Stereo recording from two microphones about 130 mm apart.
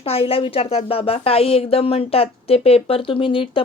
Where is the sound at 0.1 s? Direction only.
45° left (ahead or behind).